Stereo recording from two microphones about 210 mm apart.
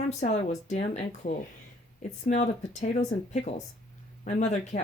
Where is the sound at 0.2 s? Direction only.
35° left (ahead or behind).